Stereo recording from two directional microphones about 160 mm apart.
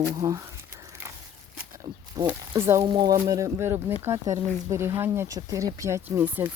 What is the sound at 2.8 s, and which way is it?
Speech, 25° right (ahead or behind).